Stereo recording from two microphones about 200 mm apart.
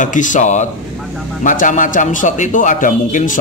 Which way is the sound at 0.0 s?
40° left (ahead or behind).